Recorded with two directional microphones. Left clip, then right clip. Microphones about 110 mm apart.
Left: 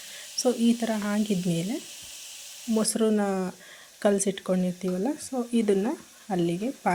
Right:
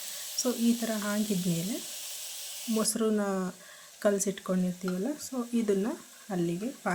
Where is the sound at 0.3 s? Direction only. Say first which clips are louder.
Left 5 dB; 30° left (ahead or behind).